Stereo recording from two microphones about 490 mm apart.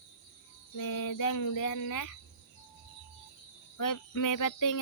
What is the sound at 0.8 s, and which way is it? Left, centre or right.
Cricket, left.